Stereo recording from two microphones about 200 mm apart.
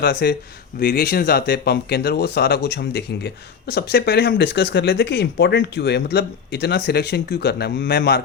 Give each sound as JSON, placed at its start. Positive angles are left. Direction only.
{"t": 0.0, "sound": "speech", "side_deg": 55}